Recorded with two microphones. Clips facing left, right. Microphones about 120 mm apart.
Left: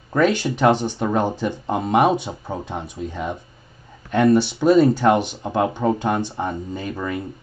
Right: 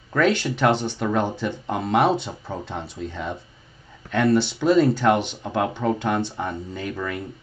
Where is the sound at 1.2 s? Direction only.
15° left (ahead or behind).